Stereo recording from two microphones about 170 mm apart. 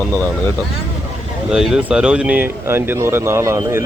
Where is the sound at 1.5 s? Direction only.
5° right (ahead or behind).